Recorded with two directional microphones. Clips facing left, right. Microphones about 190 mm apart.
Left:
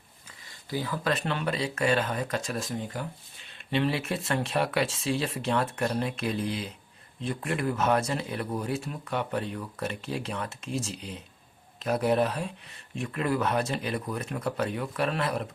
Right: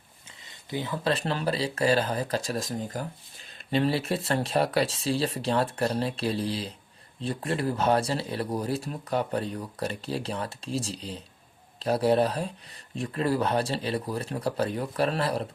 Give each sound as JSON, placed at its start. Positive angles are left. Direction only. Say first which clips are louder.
{"t": 0.4, "sound": "speech", "louder": "even", "side_deg": -20}